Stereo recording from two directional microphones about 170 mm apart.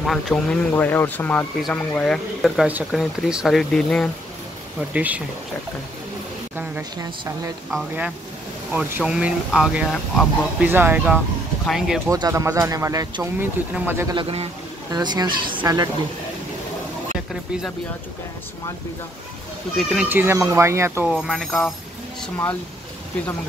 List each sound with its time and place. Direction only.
0.0 s speech: 5° left (ahead or behind)
4.9 s speech: 10° right (ahead or behind)
6.5 s a sound: 10° right (ahead or behind)
7.0 s speech: 20° right (ahead or behind)
8.7 s speech: 5° right (ahead or behind)
11.6 s speech: centre (ahead or behind)
12.1 s speech: 20° right (ahead or behind)
14.1 s a man's voice: 35° right (ahead or behind)
14.9 s speech: 25° right (ahead or behind)
19.8 s speech: centre (ahead or behind)
20.1 s speech: 10° right (ahead or behind)
21.1 s speech: centre (ahead or behind)